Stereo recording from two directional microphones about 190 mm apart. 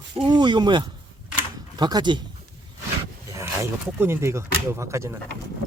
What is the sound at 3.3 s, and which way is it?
Speech, 15° right (ahead or behind).